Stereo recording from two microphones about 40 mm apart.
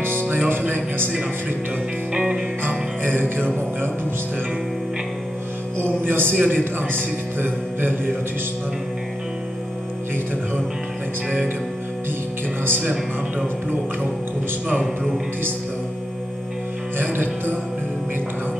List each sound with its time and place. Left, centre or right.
0.5 s music: right
2.1 s music: centre
3.0 s a man's voice: right
6.0 s a man's voice: right
6.3 s a man's voice: right
6.6 s a man's voice: right
17.0 s music: right